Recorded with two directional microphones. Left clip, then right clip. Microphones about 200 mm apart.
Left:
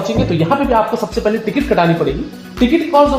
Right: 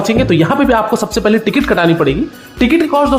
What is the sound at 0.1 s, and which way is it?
A woman's voice, 30° right (ahead or behind).